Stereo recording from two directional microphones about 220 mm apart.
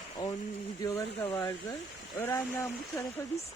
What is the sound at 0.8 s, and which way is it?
Speech, 15° left (ahead or behind).